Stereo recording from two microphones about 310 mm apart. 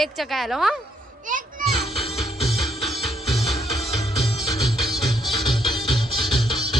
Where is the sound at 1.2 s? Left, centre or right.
Right.